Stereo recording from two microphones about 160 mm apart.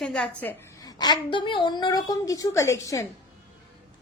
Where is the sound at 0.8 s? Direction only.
25° left (ahead or behind).